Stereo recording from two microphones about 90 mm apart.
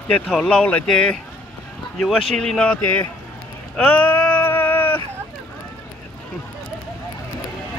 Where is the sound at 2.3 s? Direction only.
10° left (ahead or behind).